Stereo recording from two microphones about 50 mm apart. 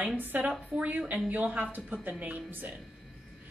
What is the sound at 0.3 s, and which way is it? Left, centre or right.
A woman's voice, right.